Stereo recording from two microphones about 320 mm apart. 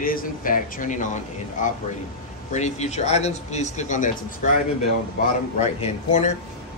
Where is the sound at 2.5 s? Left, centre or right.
Left.